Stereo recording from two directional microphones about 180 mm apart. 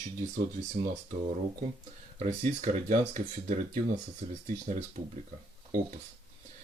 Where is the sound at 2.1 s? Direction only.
35° right (ahead or behind).